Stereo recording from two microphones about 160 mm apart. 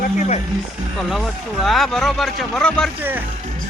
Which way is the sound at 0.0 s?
50° left (ahead or behind).